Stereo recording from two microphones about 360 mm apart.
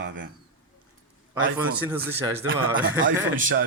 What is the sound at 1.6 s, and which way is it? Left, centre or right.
Speech, centre.